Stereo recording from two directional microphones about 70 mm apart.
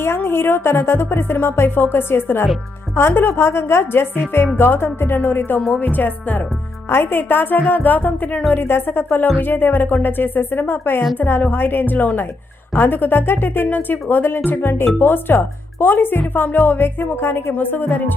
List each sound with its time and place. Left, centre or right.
0.0 s speech: left
8.6 s speech: left